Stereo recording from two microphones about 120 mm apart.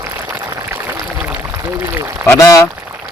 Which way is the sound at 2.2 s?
25° left (ahead or behind).